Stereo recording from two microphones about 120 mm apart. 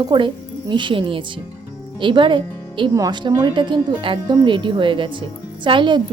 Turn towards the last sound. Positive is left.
turn(degrees=-40)  # may be behind; listen again after turning